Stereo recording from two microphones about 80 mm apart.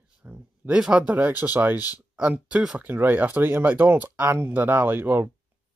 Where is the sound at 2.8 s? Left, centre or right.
Right.